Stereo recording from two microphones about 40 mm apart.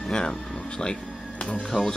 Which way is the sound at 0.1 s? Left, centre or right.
Centre.